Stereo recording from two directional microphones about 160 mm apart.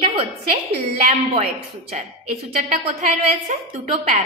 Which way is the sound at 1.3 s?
40° right (ahead or behind).